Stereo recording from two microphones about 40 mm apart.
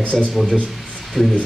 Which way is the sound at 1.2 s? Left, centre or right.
Centre.